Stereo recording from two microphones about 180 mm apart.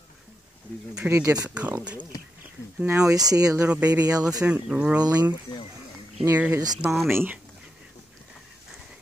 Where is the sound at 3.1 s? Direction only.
20° right (ahead or behind).